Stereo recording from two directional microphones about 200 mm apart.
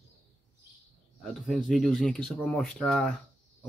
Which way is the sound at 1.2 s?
Centre (ahead or behind).